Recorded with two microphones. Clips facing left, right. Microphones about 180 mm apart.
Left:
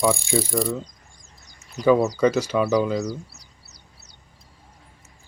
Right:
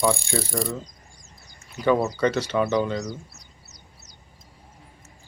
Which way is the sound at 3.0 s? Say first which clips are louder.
Left 4 dB; 35° left (ahead or behind).